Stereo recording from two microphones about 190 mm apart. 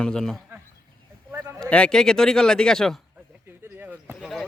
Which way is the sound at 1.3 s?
10° right (ahead or behind).